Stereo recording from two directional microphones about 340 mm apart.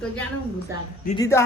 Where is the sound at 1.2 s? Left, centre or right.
Centre.